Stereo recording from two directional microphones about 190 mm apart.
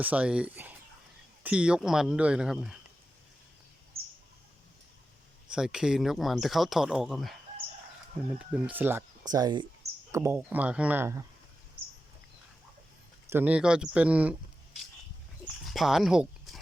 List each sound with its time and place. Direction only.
0.0 s speech: 5° right (ahead or behind)
3.9 s bird: 55° right (ahead or behind)
5.5 s speech: 5° right (ahead or behind)
8.5 s speech: 5° right (ahead or behind)
9.3 s speech: 20° right (ahead or behind)
13.3 s speech: 5° right (ahead or behind)
15.4 s a sound: centre (ahead or behind)